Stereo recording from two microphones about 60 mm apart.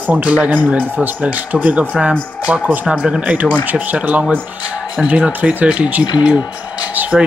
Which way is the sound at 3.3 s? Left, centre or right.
Right.